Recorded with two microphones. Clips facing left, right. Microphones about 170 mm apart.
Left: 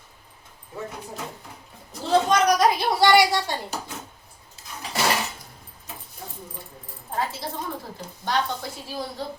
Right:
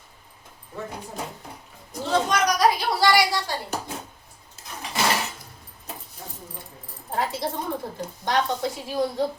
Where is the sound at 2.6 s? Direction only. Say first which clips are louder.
Left 1 dB; 25° left (ahead or behind).